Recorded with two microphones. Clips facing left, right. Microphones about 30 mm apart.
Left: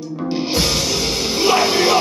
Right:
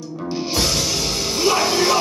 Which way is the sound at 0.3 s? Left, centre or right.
Left.